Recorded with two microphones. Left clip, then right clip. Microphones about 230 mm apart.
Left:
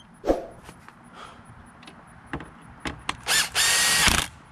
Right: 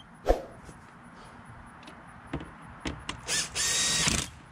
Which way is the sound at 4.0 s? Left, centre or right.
Centre.